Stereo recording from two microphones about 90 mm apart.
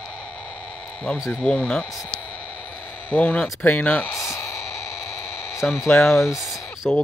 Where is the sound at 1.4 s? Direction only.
10° left (ahead or behind).